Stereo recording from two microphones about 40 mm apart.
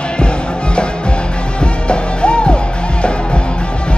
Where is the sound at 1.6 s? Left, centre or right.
Left.